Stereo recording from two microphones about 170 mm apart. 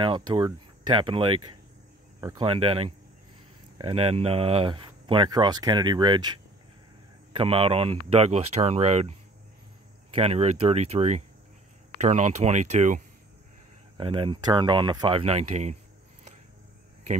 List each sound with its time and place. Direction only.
0.0 s speech: 30° right (ahead or behind)
2.1 s cricket: 20° right (ahead or behind)
2.4 s speech: 30° right (ahead or behind)
7.3 s speech: 35° right (ahead or behind)
10.1 s speech: 35° right (ahead or behind)
13.9 s speech: 30° right (ahead or behind)